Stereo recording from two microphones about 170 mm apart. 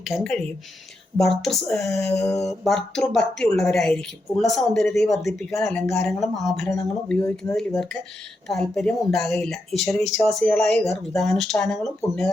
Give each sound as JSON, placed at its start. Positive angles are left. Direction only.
{"t": 0.1, "sound": "speech", "side_deg": 5}
{"t": 2.2, "sound": "speech", "side_deg": 15}
{"t": 2.5, "sound": "speech", "side_deg": 0}
{"t": 7.2, "sound": "speech", "side_deg": 15}
{"t": 7.5, "sound": "speech", "side_deg": 0}